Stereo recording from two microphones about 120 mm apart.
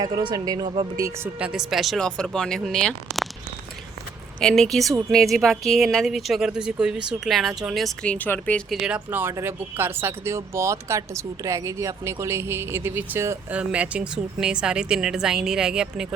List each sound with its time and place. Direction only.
0.0 s speech: 40° right (ahead or behind)
1.4 s speech: 5° right (ahead or behind)
4.4 s speech: 5° left (ahead or behind)
8.7 s speech: centre (ahead or behind)
9.0 s speech: 15° right (ahead or behind)
13.5 s speech: 10° right (ahead or behind)